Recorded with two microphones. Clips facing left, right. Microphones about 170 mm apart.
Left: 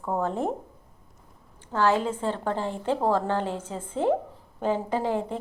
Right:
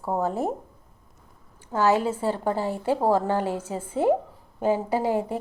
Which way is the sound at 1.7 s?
10° right (ahead or behind).